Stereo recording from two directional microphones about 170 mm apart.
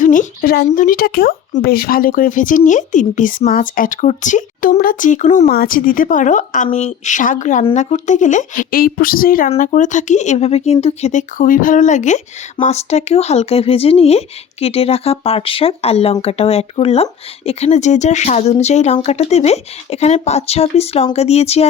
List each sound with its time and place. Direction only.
0.0 s speech: 50° left (ahead or behind)
5.5 s speech: 60° left (ahead or behind)
9.6 s speech: 45° left (ahead or behind)